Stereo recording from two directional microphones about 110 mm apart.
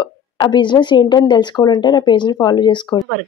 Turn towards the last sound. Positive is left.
turn(degrees=45)  # may be behind; listen again after turning